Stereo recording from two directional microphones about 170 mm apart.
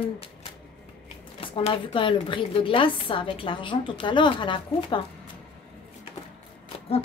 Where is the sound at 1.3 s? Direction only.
30° left (ahead or behind).